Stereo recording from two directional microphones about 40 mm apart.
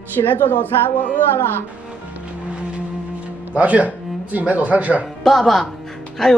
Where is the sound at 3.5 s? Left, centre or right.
Right.